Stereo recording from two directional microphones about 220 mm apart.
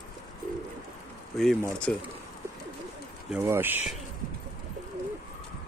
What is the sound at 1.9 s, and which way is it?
Speech, 5° left (ahead or behind).